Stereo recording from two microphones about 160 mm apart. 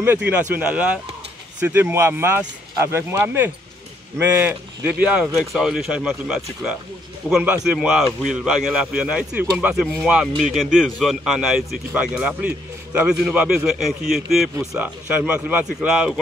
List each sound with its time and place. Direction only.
0.3 s a man's voice: 10° right (ahead or behind)